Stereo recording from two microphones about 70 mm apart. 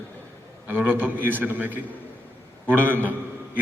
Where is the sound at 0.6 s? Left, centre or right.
Right.